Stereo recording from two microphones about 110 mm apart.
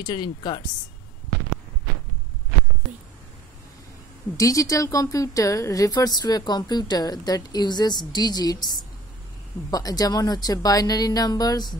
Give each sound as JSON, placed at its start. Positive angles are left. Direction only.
{"t": 0.0, "sound": "a woman's voice", "side_deg": 40}
{"t": 4.4, "sound": "a woman's voice", "side_deg": 30}